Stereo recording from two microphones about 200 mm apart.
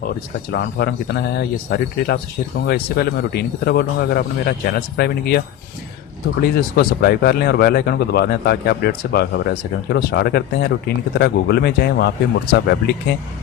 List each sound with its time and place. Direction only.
0.5 s speech: 55° left (ahead or behind)
6.4 s speech: 50° left (ahead or behind)